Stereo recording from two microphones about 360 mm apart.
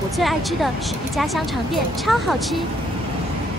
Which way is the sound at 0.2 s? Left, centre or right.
Centre.